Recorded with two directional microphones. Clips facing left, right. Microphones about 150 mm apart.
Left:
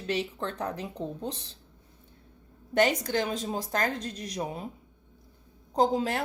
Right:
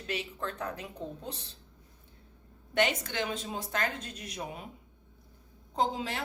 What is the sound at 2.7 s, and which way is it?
A woman's voice, 40° left (ahead or behind).